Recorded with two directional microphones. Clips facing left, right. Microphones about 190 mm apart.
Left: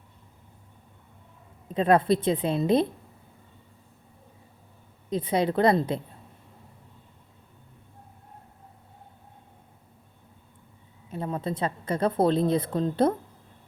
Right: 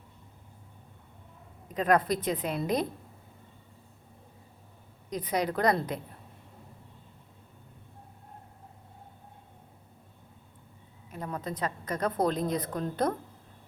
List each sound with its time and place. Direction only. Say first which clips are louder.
1.6 s a woman's voice: left 4 dB; 30° left (ahead or behind)
5.0 s a woman's voice: left 5 dB; 25° left (ahead or behind)
11.1 s a woman's voice: left 5 dB; 25° left (ahead or behind)